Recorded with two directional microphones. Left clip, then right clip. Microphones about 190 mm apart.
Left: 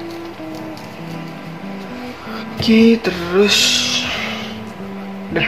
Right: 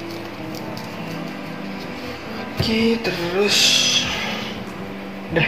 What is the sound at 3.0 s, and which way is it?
Speech, 45° left (ahead or behind).